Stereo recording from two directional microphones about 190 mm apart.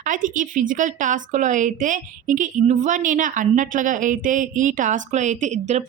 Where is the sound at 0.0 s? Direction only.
45° right (ahead or behind).